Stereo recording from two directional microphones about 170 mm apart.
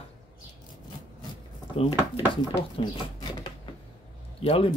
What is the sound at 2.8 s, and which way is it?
Speech, 35° left (ahead or behind).